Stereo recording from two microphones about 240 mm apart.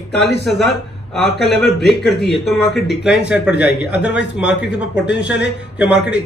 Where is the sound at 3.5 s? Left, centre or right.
Left.